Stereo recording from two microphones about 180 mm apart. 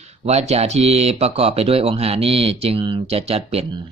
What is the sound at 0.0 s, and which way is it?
Speech, 35° right (ahead or behind).